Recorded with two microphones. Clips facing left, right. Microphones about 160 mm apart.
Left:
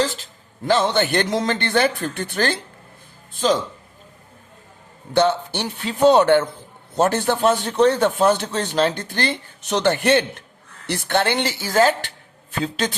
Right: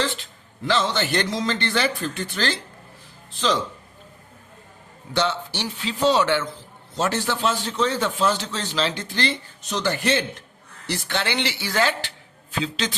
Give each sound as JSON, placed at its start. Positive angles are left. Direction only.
{"t": 0.0, "sound": "a man's voice", "side_deg": 40}
{"t": 5.1, "sound": "a man's voice", "side_deg": 50}